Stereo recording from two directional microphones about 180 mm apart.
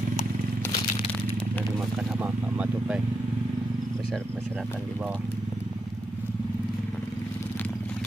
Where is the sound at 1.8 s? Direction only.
Centre (ahead or behind).